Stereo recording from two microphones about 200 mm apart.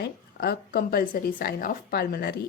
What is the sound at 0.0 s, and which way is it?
Speech, 50° left (ahead or behind).